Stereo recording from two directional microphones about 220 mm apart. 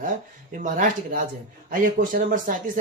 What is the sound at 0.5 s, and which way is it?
Speech, 35° right (ahead or behind).